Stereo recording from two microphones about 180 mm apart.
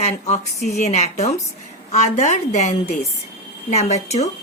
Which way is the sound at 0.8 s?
40° left (ahead or behind).